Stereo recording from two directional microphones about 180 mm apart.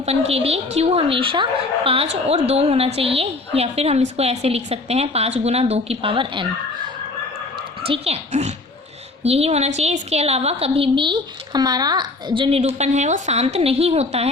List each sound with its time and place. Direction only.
0.3 s a woman's voice: 35° right (ahead or behind)
7.8 s a woman's voice: 35° right (ahead or behind)